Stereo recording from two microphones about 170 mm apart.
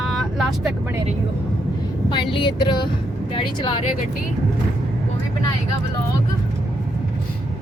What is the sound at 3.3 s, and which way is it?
Speech, 35° left (ahead or behind).